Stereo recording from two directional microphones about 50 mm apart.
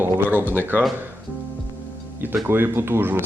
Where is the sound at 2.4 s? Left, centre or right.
Right.